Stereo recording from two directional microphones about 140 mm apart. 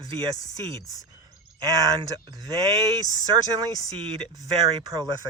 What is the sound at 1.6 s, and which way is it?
Speech, 25° right (ahead or behind).